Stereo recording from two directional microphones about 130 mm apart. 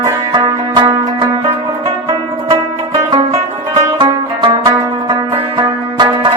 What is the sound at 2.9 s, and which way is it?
Music, 35° right (ahead or behind).